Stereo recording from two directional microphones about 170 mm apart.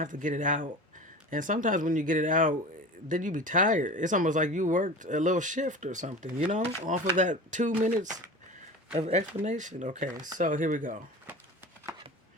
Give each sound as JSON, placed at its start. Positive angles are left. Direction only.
{"t": 0.0, "sound": "speech", "side_deg": -50}